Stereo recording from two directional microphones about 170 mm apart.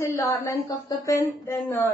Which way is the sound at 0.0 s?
15° left (ahead or behind).